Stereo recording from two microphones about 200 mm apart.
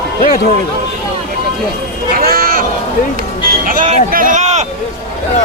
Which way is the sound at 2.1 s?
45° right (ahead or behind).